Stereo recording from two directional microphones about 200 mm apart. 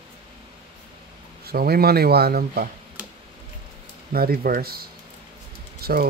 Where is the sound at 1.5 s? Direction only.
50° right (ahead or behind).